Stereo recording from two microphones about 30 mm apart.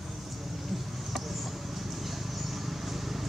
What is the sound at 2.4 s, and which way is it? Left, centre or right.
Vehicle, centre.